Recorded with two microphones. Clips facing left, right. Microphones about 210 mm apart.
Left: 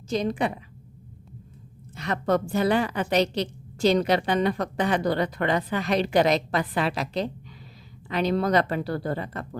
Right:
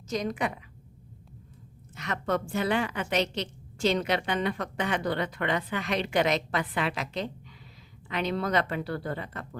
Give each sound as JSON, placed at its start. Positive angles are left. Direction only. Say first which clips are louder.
{"t": 0.1, "sound": "a woman's voice", "louder": "left 4 dB", "side_deg": 30}
{"t": 2.0, "sound": "a woman's voice", "louder": "left 5 dB", "side_deg": 35}